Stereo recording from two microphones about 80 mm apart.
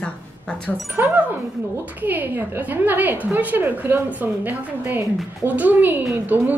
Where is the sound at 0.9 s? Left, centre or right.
Right.